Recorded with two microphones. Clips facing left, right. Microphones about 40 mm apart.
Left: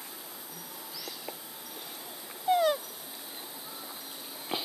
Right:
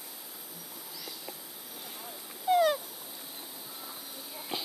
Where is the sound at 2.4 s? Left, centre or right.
Centre.